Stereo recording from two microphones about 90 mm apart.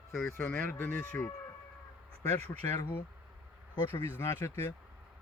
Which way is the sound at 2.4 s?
20° left (ahead or behind).